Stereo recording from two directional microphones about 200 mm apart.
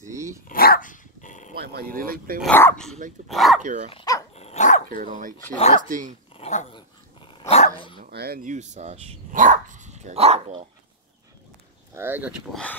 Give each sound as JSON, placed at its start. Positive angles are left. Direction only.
{"t": 0.1, "sound": "dog", "side_deg": -15}
{"t": 0.5, "sound": "dog", "side_deg": 45}
{"t": 1.5, "sound": "a sound", "side_deg": -55}
{"t": 2.0, "sound": "speech", "side_deg": -45}
{"t": 2.4, "sound": "speech", "side_deg": 5}
{"t": 3.9, "sound": "speech", "side_deg": 20}
{"t": 4.4, "sound": "dog", "side_deg": 35}
{"t": 4.8, "sound": "speech", "side_deg": -40}
{"t": 6.3, "sound": "dog", "side_deg": 30}
{"t": 8.1, "sound": "speech", "side_deg": -50}
{"t": 11.9, "sound": "speech", "side_deg": -10}